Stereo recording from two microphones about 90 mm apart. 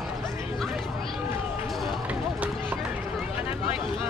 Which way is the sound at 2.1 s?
15° right (ahead or behind).